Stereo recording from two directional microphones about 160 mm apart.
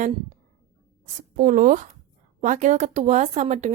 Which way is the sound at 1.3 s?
55° right (ahead or behind).